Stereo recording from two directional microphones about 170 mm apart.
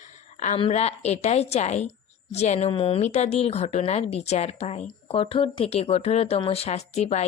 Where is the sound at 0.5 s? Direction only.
35° left (ahead or behind).